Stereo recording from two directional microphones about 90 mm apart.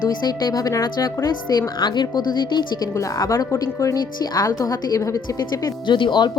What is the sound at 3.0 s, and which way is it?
A woman's voice, 35° left (ahead or behind).